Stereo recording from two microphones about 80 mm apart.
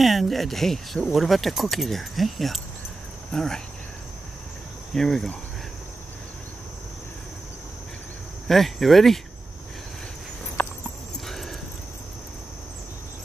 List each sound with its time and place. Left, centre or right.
0.0 s speech: centre
4.9 s speech: centre
8.5 s speech: centre
10.6 s horse: left
11.2 s a sound: centre